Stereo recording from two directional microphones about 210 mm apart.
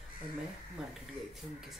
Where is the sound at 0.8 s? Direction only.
5° right (ahead or behind).